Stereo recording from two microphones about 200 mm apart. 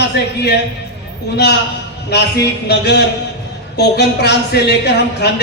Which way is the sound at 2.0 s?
55° left (ahead or behind).